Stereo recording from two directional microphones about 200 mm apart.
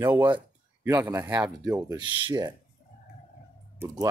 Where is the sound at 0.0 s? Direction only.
10° right (ahead or behind).